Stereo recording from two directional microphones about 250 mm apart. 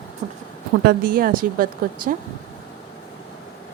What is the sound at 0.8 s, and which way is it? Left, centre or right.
A woman's voice, right.